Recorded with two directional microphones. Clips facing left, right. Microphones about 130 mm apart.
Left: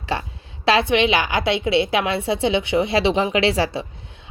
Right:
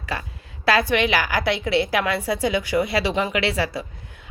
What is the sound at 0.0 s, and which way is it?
A woman's voice, 25° left (ahead or behind).